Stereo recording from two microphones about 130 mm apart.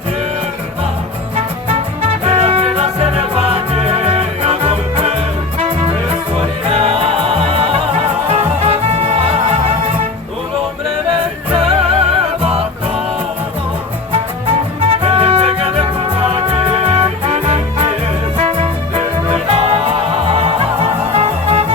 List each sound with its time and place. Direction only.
2.2 s music: 50° right (ahead or behind)
11.9 s music: 50° right (ahead or behind)
15.0 s music: 50° right (ahead or behind)